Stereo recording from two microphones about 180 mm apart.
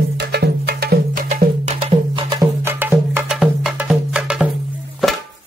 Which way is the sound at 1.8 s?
30° right (ahead or behind).